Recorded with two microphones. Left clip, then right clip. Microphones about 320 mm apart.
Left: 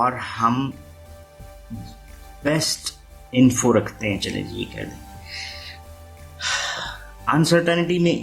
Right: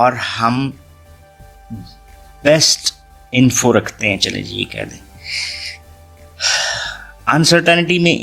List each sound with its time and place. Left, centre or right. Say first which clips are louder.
0.0 s speech: right 6 dB; right
2.4 s speech: right 11 dB; right
6.3 s gasp: right 8 dB; right